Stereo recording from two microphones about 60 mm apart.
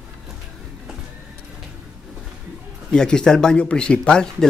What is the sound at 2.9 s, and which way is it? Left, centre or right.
Speech, centre.